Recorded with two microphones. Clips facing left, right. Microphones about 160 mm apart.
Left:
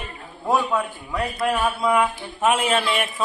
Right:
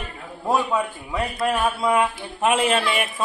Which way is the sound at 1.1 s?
20° right (ahead or behind).